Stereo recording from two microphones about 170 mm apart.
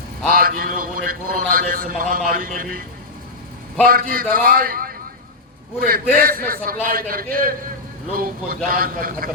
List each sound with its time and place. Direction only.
0.3 s a man's voice: 55° right (ahead or behind)
3.8 s a man's voice: 60° right (ahead or behind)